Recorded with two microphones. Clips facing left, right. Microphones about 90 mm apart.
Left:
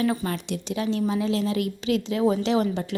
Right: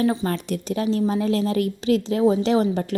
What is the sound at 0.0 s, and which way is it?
Speech, 25° right (ahead or behind).